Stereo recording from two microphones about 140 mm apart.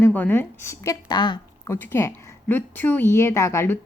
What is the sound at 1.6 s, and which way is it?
A woman's voice, 20° left (ahead or behind).